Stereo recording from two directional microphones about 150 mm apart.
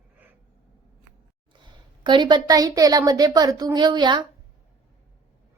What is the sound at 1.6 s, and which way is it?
A woman's voice, 30° right (ahead or behind).